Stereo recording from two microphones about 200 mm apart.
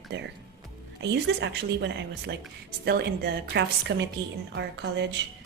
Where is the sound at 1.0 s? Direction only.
60° right (ahead or behind).